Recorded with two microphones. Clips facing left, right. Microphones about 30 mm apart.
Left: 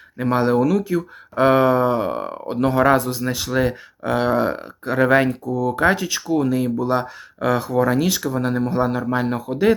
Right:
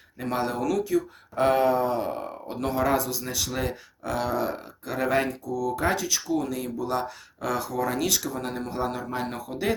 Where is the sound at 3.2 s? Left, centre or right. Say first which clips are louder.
Left 9 dB; left.